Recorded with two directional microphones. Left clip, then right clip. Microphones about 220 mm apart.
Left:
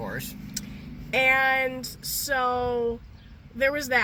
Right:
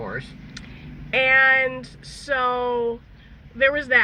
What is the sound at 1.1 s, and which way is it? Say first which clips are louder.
Speech: right 5 dB; 20° left (ahead or behind).